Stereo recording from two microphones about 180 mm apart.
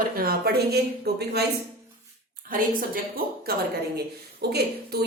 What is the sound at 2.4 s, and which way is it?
A woman's voice, 50° right (ahead or behind).